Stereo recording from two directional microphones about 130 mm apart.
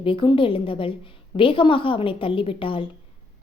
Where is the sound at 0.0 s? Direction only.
40° left (ahead or behind).